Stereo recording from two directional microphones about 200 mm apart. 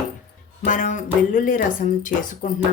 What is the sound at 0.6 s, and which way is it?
Speech, 40° left (ahead or behind).